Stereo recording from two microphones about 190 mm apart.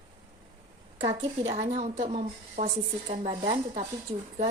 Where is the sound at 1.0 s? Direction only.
35° right (ahead or behind).